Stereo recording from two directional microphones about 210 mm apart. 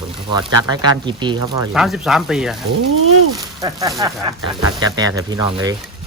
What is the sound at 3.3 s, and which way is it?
Speech, 15° right (ahead or behind).